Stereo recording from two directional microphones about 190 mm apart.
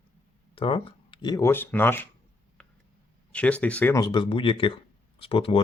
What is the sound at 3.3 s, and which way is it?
Speech, 5° left (ahead or behind).